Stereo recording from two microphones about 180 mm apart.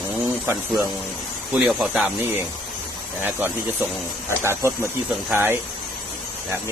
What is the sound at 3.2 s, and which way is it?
Speech, 10° right (ahead or behind).